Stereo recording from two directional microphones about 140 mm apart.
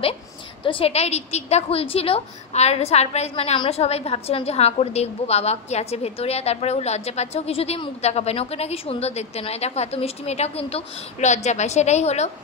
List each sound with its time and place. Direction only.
0.7 s a woman's voice: 40° left (ahead or behind)